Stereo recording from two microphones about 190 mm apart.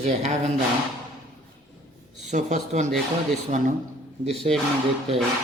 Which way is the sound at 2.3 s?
40° right (ahead or behind).